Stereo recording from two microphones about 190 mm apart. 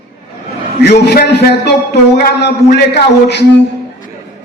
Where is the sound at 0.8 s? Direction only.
60° left (ahead or behind).